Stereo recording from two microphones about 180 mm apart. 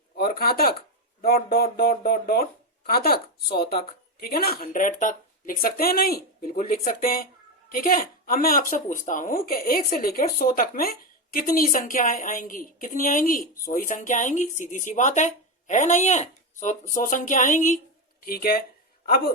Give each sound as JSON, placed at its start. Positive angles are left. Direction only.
{"t": 0.2, "sound": "a woman's voice", "side_deg": 60}
{"t": 18.2, "sound": "speech", "side_deg": 55}